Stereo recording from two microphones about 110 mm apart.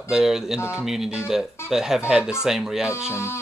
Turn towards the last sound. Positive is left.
turn(degrees=25)  # may be behind; listen again after turning